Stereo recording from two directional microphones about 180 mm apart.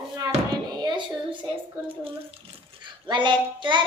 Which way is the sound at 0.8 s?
25° right (ahead or behind).